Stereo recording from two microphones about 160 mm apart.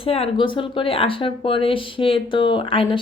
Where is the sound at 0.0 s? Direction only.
35° left (ahead or behind).